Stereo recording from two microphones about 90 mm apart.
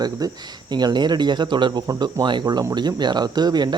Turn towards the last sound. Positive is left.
turn(degrees=-50)  # may be behind; listen again after turning